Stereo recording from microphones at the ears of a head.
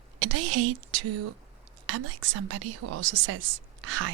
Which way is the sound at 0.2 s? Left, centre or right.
Right.